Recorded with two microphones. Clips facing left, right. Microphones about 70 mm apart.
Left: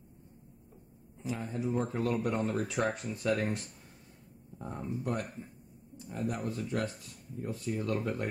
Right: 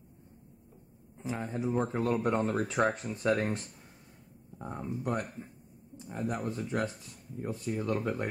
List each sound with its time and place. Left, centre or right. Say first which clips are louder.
1.2 s speech: right 1 dB; right
5.9 s speech: right 1 dB; right